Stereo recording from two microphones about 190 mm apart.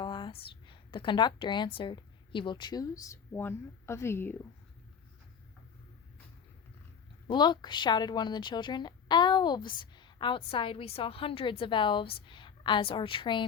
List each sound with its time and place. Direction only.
0.0 s speech: 25° left (ahead or behind)
7.3 s a woman's voice: 25° left (ahead or behind)